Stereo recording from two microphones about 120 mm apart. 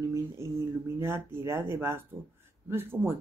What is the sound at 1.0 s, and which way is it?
Speech, 20° right (ahead or behind).